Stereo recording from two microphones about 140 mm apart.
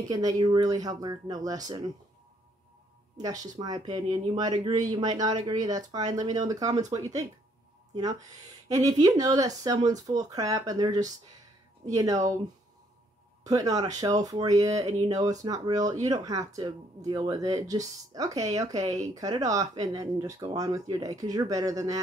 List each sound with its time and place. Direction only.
0.1 s speech: 25° right (ahead or behind)
3.2 s speech: 25° right (ahead or behind)
7.9 s speech: 25° right (ahead or behind)
13.5 s speech: 25° right (ahead or behind)